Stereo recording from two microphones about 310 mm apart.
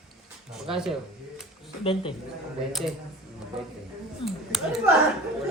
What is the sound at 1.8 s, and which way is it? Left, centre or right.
Speech, centre.